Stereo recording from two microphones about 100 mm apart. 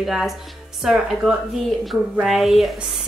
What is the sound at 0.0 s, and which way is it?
Speech, centre (ahead or behind).